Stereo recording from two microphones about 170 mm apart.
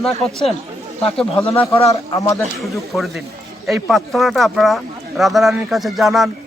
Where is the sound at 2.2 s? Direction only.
20° left (ahead or behind).